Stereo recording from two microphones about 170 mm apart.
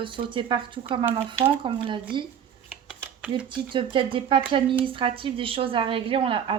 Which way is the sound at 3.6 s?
30° right (ahead or behind).